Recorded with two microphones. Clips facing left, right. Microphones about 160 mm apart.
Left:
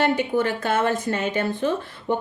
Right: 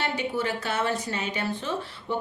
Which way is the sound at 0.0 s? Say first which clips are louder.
Left 7 dB; 50° left (ahead or behind).